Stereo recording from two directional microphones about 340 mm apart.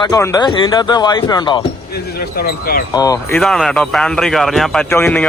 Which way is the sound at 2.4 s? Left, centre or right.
Left.